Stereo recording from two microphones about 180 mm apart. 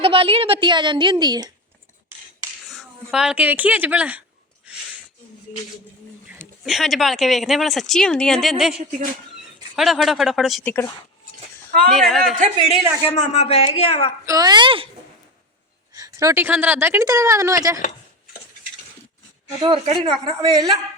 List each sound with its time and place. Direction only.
0.0 s a woman's voice: 30° right (ahead or behind)
2.7 s speech: centre (ahead or behind)
6.7 s speech: centre (ahead or behind)
11.9 s speech: centre (ahead or behind)
12.4 s a man's voice: 40° right (ahead or behind)
13.1 s speech: 40° left (ahead or behind)
14.3 s a woman's voice: 20° right (ahead or behind)
16.0 s speech: 20° right (ahead or behind)
19.6 s a woman's voice: 30° right (ahead or behind)